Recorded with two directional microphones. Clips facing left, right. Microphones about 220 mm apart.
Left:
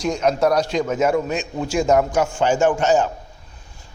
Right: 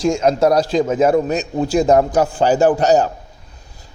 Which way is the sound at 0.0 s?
30° right (ahead or behind).